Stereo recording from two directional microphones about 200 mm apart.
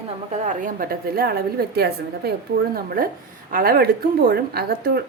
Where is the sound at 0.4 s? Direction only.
40° right (ahead or behind).